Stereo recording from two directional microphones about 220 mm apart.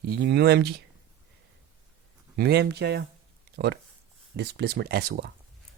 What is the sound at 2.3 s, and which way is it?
Speech, 50° right (ahead or behind).